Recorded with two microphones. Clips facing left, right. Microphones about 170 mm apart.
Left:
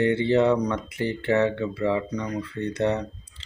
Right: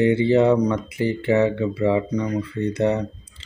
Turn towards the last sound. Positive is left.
turn(degrees=-10)  # may be behind; listen again after turning